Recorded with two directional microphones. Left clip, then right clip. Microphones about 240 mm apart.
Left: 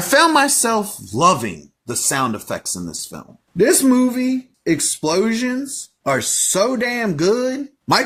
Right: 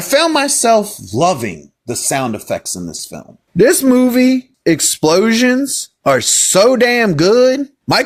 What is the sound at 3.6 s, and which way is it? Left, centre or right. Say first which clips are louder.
Speech: right 5 dB; right.